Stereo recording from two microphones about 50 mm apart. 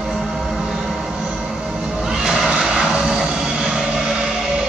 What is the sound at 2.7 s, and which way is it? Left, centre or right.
Vehicle, centre.